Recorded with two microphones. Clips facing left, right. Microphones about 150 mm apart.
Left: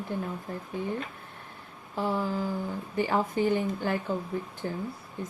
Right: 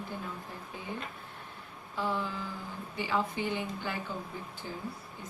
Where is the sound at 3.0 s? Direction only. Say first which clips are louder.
Left 6 dB; 50° left (ahead or behind).